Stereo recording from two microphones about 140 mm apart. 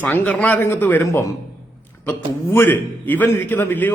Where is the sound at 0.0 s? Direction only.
10° left (ahead or behind).